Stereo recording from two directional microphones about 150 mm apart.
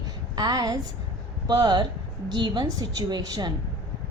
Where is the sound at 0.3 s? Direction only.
25° right (ahead or behind).